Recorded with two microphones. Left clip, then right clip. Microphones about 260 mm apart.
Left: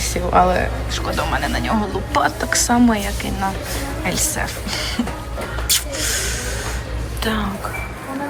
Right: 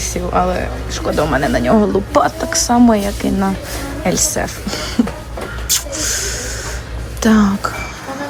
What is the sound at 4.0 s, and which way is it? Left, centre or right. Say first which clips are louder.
A woman's voice: right 6 dB; right.